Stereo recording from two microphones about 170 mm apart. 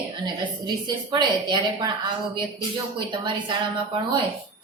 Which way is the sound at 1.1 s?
25° right (ahead or behind).